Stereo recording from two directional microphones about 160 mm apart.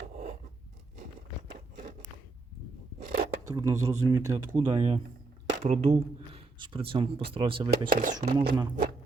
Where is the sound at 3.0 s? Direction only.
70° right (ahead or behind).